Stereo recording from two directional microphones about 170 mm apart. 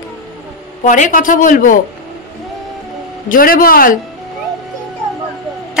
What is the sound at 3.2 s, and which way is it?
Speech, 55° left (ahead or behind).